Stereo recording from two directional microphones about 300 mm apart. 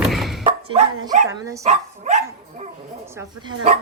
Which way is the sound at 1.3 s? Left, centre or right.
Centre.